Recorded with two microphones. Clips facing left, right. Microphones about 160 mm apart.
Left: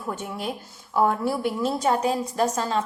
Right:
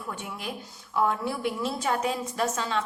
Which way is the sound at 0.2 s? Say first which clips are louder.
Left 5 dB; 35° left (ahead or behind).